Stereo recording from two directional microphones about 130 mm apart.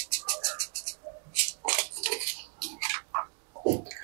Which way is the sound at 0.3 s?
20° right (ahead or behind).